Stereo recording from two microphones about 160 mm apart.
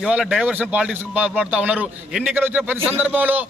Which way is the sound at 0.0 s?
5° right (ahead or behind).